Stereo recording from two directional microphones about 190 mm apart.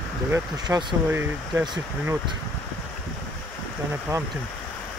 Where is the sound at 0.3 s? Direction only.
20° right (ahead or behind).